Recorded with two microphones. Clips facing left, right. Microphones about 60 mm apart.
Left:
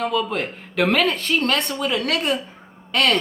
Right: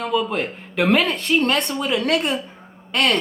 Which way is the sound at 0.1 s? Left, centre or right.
Centre.